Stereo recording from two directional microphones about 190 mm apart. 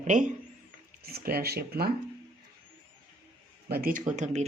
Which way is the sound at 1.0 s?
55° right (ahead or behind).